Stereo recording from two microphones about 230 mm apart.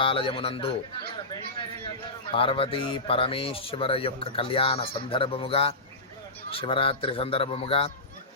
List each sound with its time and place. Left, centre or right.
0.0 s a man's voice: left
2.3 s a man's voice: left